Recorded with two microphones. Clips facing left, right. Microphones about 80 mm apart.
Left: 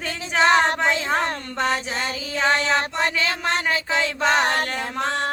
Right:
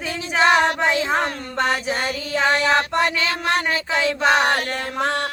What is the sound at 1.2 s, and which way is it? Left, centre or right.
Music, right.